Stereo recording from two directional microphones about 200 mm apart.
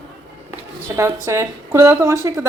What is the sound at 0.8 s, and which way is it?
A woman's voice, 15° right (ahead or behind).